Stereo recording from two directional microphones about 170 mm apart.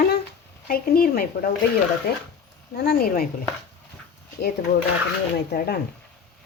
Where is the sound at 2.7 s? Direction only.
70° left (ahead or behind).